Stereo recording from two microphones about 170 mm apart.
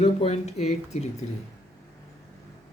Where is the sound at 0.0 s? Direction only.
40° left (ahead or behind).